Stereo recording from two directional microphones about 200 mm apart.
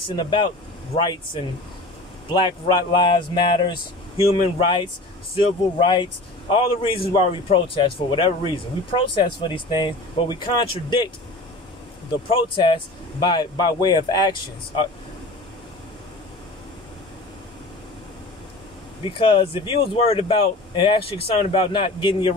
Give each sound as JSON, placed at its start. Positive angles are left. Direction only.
{"t": 0.0, "sound": "speech", "side_deg": 25}
{"t": 12.1, "sound": "speech", "side_deg": 25}
{"t": 19.0, "sound": "speech", "side_deg": 25}